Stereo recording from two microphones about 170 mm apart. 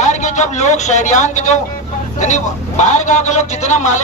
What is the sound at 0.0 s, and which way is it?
A man's voice, 45° left (ahead or behind).